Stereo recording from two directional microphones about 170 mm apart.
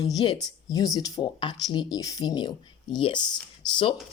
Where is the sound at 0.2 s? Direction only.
30° left (ahead or behind).